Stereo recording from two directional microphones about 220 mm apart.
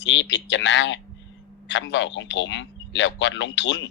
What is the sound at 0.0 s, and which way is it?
Speech, 55° left (ahead or behind).